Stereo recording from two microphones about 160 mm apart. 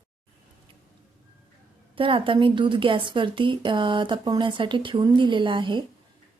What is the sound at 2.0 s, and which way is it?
A woman's voice, 35° right (ahead or behind).